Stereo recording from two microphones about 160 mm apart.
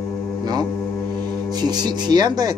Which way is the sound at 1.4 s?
25° right (ahead or behind).